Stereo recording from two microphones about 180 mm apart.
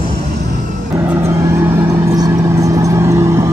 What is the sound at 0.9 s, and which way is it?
Vehicle, 10° right (ahead or behind).